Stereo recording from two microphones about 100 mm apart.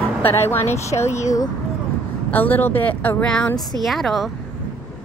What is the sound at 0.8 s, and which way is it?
Speech, 30° left (ahead or behind).